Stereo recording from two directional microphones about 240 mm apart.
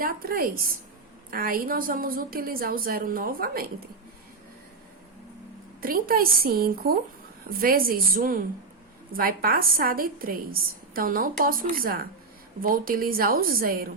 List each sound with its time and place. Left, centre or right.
0.0 s a woman's voice: right
5.8 s a woman's voice: right